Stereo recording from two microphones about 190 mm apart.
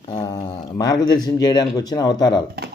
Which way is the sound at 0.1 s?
20° left (ahead or behind).